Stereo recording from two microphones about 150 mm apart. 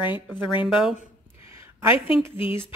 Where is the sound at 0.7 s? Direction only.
5° right (ahead or behind).